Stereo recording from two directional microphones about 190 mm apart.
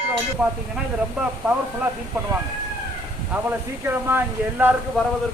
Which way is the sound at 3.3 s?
10° right (ahead or behind).